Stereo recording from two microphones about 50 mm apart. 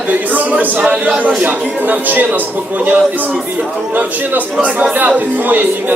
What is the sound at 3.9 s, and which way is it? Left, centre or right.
A man's voice, right.